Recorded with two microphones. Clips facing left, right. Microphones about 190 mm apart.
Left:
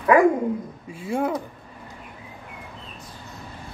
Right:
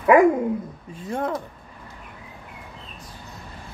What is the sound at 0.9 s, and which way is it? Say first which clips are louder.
Speech: left 2 dB; 10° left (ahead or behind).